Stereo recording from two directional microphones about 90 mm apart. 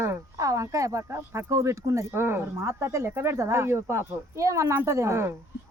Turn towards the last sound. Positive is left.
turn(degrees=-30)  # may be behind; listen again after turning